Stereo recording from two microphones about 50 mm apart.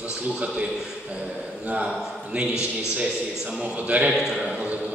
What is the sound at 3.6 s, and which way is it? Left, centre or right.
Speech, right.